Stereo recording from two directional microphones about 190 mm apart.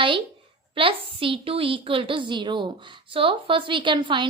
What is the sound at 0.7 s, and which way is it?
A woman's voice, 30° right (ahead or behind).